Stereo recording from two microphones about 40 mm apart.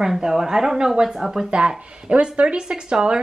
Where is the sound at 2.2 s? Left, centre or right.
Right.